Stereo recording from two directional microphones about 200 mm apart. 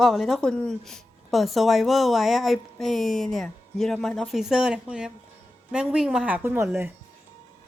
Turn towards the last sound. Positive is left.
turn(degrees=-10)  # may be behind; listen again after turning